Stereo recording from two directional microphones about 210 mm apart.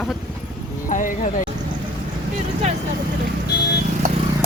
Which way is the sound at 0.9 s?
40° left (ahead or behind).